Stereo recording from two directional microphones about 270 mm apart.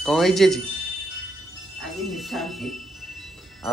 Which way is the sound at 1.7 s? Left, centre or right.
Centre.